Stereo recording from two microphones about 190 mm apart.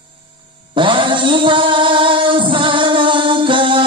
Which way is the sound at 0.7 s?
25° right (ahead or behind).